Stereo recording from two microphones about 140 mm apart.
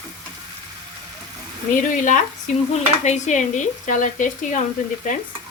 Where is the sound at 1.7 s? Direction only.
70° left (ahead or behind).